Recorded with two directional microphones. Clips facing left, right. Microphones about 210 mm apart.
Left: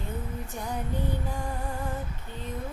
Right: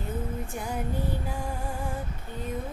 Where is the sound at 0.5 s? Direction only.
10° right (ahead or behind).